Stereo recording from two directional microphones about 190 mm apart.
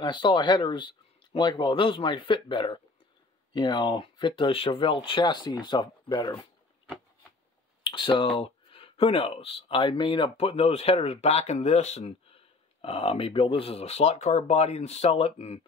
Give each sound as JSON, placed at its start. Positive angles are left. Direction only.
{"t": 0.0, "sound": "speech", "side_deg": 25}
{"t": 7.8, "sound": "speech", "side_deg": 25}